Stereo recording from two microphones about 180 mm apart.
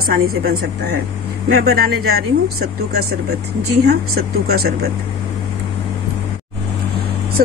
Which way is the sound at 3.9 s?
60° right (ahead or behind).